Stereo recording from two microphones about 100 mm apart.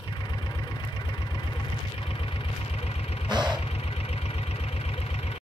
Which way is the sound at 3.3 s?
45° right (ahead or behind).